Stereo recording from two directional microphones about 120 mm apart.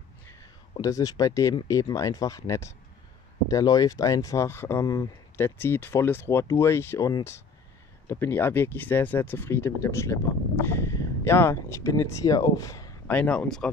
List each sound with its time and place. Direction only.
0.3 s speech: 30° left (ahead or behind)
4.8 s speech: 35° left (ahead or behind)
5.4 s speech: 20° left (ahead or behind)
8.1 s speech: 20° left (ahead or behind)
13.0 s speech: 10° left (ahead or behind)